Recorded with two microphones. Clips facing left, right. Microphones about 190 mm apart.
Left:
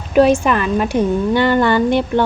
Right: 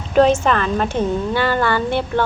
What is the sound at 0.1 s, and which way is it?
A woman's voice, 10° left (ahead or behind).